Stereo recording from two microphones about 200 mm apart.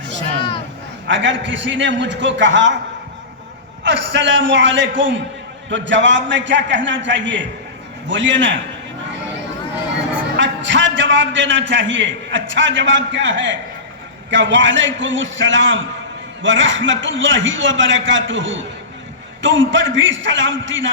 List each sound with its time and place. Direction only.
1.0 s a man's voice: 65° right (ahead or behind)
3.8 s a man's voice: 65° right (ahead or behind)
10.3 s a man's voice: 65° right (ahead or behind)